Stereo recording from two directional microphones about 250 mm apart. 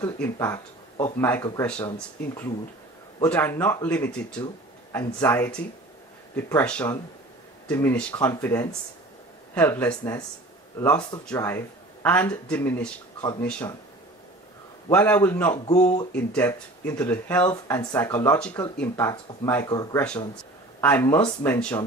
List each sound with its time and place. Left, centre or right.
0.0 s speech: centre
14.9 s speech: centre
15.5 s speech: left
16.1 s speech: centre